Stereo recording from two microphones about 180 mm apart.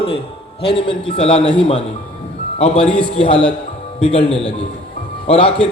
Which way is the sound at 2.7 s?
5° left (ahead or behind).